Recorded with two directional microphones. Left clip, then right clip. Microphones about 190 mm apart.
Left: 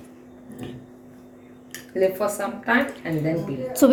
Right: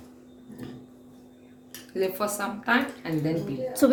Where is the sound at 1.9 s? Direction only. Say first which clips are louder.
Left 6 dB; 35° right (ahead or behind).